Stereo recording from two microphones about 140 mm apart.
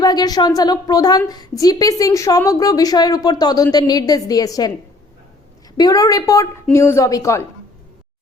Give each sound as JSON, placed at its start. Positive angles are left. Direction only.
{"t": 0.0, "sound": "a woman's voice", "side_deg": 30}
{"t": 5.7, "sound": "a woman's voice", "side_deg": 25}